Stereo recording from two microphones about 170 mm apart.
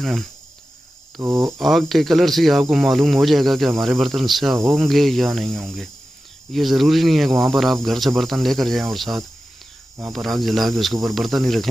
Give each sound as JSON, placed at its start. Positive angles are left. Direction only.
{"t": 0.0, "sound": "speech", "side_deg": 0}
{"t": 1.2, "sound": "speech", "side_deg": -15}
{"t": 1.5, "sound": "speech", "side_deg": 0}